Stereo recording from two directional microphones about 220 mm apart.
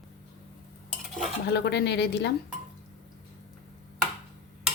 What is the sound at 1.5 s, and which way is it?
Speech, 50° left (ahead or behind).